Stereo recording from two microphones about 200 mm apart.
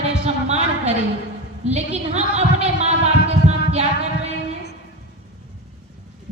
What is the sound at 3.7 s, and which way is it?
Music, 30° right (ahead or behind).